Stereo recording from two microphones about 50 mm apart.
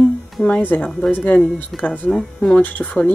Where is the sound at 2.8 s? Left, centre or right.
Left.